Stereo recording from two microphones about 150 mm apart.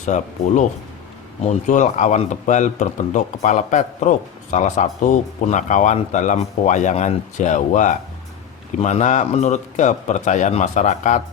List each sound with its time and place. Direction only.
0.0 s a man's voice: 55° left (ahead or behind)